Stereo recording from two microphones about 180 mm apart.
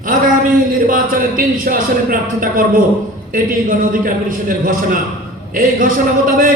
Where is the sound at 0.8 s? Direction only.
50° right (ahead or behind).